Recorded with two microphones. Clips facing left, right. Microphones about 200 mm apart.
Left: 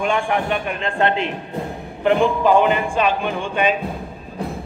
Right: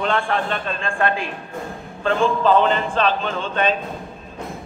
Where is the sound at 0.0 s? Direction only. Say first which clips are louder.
Left 1 dB; 15° left (ahead or behind).